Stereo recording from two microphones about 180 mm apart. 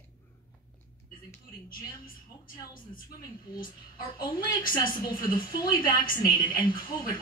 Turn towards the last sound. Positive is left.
turn(degrees=50)  # may be behind; listen again after turning